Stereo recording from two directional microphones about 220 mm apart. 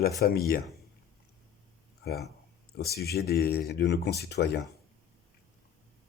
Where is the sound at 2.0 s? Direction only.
45° left (ahead or behind).